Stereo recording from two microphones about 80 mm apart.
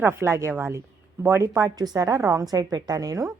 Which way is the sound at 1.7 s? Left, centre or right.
Right.